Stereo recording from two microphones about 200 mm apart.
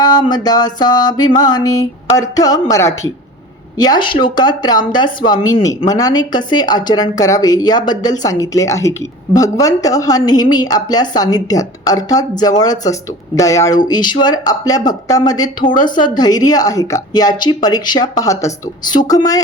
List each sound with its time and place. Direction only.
0.0 s a woman's voice: 20° left (ahead or behind)